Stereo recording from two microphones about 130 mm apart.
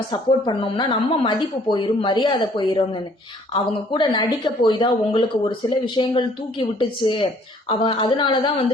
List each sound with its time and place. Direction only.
0.1 s speech: 40° left (ahead or behind)